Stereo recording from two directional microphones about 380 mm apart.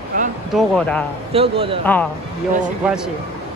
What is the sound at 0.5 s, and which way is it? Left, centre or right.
Speech, centre.